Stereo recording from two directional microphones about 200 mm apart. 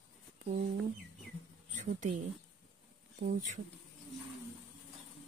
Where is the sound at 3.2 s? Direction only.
40° right (ahead or behind).